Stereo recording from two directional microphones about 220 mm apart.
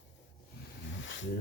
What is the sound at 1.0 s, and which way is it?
Wild animals, 55° left (ahead or behind).